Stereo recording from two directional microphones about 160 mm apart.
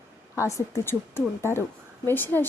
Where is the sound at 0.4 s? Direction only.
20° left (ahead or behind).